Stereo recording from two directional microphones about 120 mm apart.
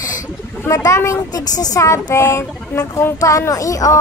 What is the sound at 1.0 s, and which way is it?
Speech, 20° left (ahead or behind).